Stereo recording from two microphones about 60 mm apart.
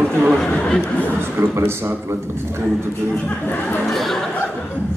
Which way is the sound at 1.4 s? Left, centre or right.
Right.